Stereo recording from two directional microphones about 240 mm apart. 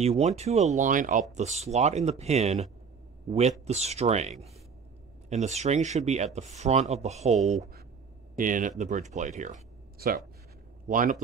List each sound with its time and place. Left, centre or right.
0.0 s a man's voice: right